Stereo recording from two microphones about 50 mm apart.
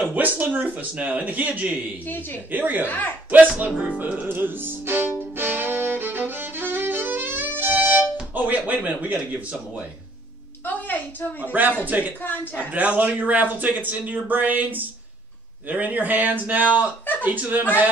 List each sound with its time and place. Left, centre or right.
0.0 s speech: right
2.0 s a woman's voice: left
2.5 s speech: right
2.9 s a woman's voice: left
3.3 s speech: right
4.0 s music: right
8.4 s speech: right
10.6 s a woman's voice: left
11.8 s speech: right
12.2 s a woman's voice: left
12.7 s speech: right